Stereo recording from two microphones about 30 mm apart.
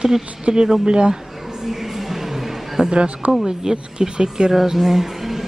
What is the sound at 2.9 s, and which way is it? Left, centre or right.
Speech, right.